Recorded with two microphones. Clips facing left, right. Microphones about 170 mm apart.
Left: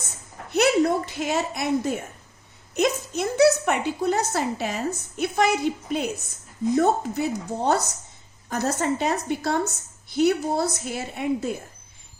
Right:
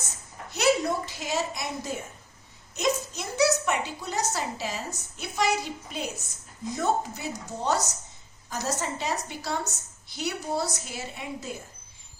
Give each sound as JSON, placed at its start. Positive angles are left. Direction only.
{"t": 0.5, "sound": "a child's voice", "side_deg": 55}